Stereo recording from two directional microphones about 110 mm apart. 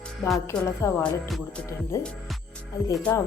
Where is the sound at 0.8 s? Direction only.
25° left (ahead or behind).